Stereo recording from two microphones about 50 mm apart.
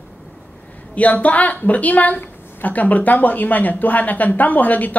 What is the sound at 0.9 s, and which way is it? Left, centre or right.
A woman's voice, left.